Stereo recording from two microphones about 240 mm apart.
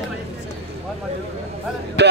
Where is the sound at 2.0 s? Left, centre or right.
Right.